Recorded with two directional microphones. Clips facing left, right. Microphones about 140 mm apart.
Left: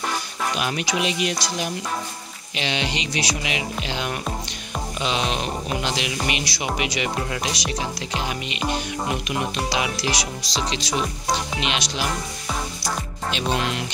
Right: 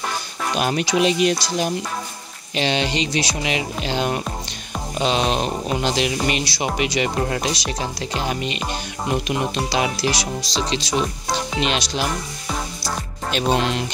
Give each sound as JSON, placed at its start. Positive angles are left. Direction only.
{"t": 0.6, "sound": "speech", "side_deg": -35}
{"t": 9.7, "sound": "speech", "side_deg": -30}
{"t": 13.3, "sound": "speech", "side_deg": -40}